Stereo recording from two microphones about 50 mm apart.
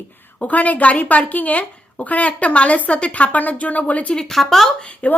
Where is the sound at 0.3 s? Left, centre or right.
Left.